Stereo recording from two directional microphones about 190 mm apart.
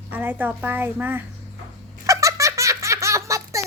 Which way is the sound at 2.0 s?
15° right (ahead or behind).